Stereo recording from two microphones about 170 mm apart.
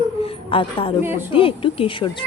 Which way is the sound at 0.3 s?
30° left (ahead or behind).